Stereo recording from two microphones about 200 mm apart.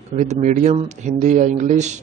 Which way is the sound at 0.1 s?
35° right (ahead or behind).